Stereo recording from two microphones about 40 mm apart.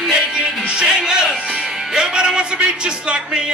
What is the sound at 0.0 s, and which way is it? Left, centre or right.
Music, centre.